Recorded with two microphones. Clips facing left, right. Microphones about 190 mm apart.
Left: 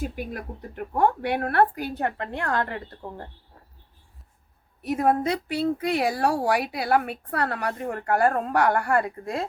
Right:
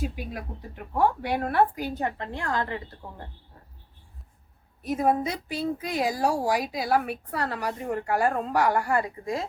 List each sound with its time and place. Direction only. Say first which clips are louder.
0.0 s speech: left 1 dB; 50° left (ahead or behind)
4.8 s speech: left 2 dB; 65° left (ahead or behind)